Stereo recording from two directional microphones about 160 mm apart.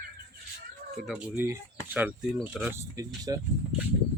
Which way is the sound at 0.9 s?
5° right (ahead or behind).